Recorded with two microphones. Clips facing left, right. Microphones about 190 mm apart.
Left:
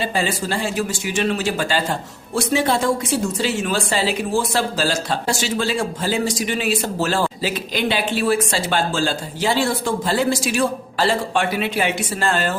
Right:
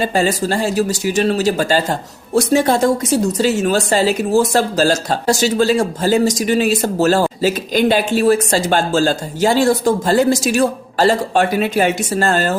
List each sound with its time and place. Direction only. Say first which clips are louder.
0.0 s speech: right 6 dB; 45° right (ahead or behind)